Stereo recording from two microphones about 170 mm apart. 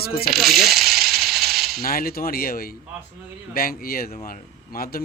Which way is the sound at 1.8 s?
55° left (ahead or behind).